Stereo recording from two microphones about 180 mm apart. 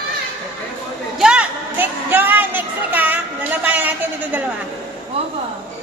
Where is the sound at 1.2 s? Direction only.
5° right (ahead or behind).